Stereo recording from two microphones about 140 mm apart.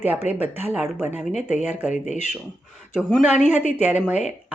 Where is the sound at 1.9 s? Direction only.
55° left (ahead or behind).